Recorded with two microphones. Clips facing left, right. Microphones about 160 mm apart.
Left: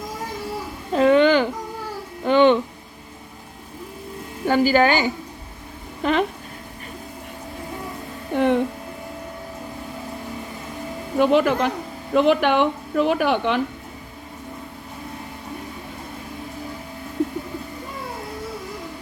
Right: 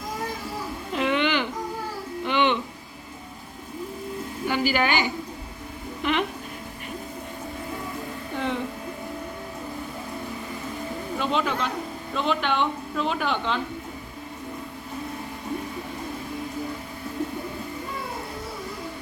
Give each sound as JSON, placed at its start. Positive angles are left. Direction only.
{"t": 0.9, "sound": "a sound", "side_deg": 40}
{"t": 4.4, "sound": "a woman's voice", "side_deg": 45}
{"t": 6.0, "sound": "speech", "side_deg": 40}
{"t": 8.3, "sound": "speech", "side_deg": 55}
{"t": 11.2, "sound": "speech", "side_deg": 60}